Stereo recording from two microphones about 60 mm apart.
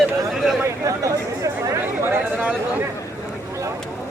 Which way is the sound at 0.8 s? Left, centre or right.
Right.